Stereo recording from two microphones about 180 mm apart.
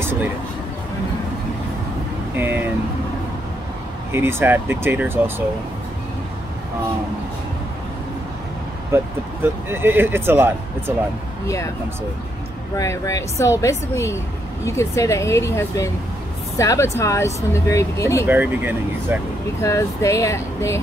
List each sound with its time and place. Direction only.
2.3 s speech: 10° right (ahead or behind)
4.1 s speech: 15° right (ahead or behind)
8.9 s speech: 10° right (ahead or behind)
11.4 s speech: 15° left (ahead or behind)
12.7 s speech: 15° left (ahead or behind)
18.2 s speech: 10° right (ahead or behind)
19.6 s speech: 15° left (ahead or behind)